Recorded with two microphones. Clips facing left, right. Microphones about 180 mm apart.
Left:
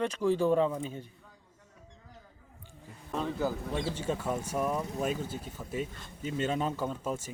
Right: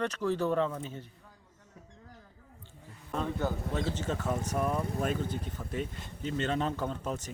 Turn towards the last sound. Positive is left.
turn(degrees=10)  # may be behind; listen again after turning